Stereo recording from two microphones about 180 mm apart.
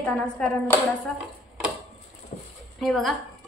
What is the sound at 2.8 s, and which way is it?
Speech, centre (ahead or behind).